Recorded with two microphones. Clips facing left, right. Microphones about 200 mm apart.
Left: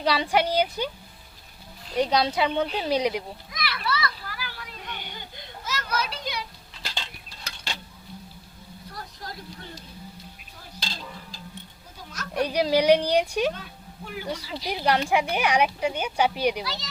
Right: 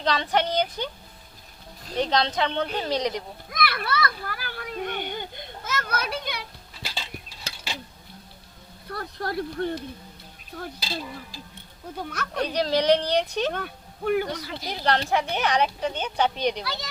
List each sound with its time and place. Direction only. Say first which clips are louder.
0.0 s speech: left 1 dB; 10° left (ahead or behind)
2.0 s speech: left 1 dB; 10° left (ahead or behind)
3.5 s children playing: right 3 dB; 55° right (ahead or behind)
6.8 s a sound: right 1 dB; 5° right (ahead or behind)
7.5 s dishes: right 1 dB; 5° right (ahead or behind)
8.9 s speech: right 10 dB; 60° right (ahead or behind)
10.8 s stir: right 5 dB; 5° right (ahead or behind)
11.9 s speech: right 7 dB; 60° right (ahead or behind)
12.3 s speech: left 2 dB; 10° left (ahead or behind)
13.5 s speech: right 4 dB; 60° right (ahead or behind)
14.7 s speech: left 1 dB; 10° left (ahead or behind)
16.6 s speech: right 1 dB; 55° right (ahead or behind)